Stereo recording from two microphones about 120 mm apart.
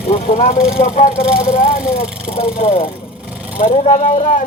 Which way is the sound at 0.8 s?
80° left.